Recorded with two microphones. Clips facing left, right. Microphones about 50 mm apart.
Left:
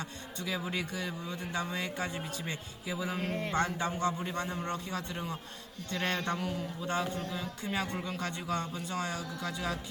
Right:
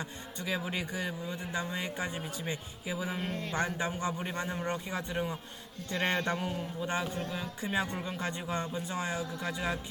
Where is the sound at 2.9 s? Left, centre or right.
Right.